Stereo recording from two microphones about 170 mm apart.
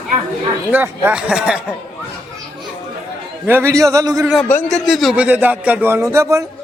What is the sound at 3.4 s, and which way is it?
Speech, 15° right (ahead or behind).